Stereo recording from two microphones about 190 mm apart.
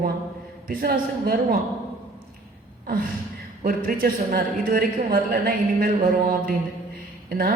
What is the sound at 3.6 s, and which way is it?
A woman's voice, 50° right (ahead or behind).